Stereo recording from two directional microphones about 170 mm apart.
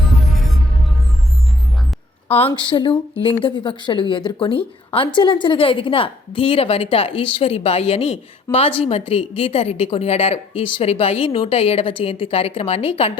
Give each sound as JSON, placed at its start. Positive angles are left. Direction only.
{"t": 2.5, "sound": "a woman's voice", "side_deg": 30}